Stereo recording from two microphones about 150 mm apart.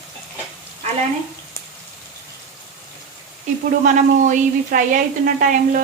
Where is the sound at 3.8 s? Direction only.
60° right (ahead or behind).